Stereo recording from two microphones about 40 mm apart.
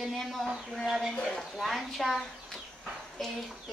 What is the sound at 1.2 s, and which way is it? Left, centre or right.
Speech, centre.